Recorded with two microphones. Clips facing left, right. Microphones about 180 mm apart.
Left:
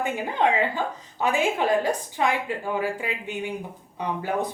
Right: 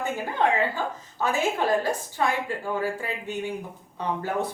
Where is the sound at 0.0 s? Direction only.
15° left (ahead or behind).